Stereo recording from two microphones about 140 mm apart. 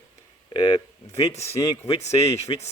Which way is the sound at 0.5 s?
35° left (ahead or behind).